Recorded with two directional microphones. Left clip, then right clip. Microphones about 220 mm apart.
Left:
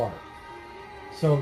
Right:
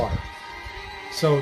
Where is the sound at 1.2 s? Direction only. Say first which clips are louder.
Right 4 dB; 30° right (ahead or behind).